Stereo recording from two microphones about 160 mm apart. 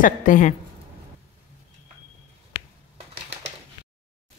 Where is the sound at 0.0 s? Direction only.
55° left (ahead or behind).